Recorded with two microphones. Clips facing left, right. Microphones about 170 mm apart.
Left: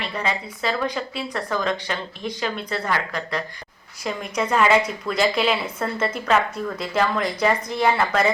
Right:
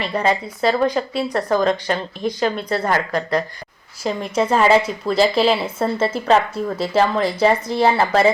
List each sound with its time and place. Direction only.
0.1 s speech: 40° right (ahead or behind)
4.0 s a woman's voice: 30° right (ahead or behind)